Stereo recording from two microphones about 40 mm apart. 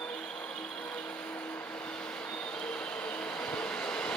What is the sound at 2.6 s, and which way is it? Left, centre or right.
Train, left.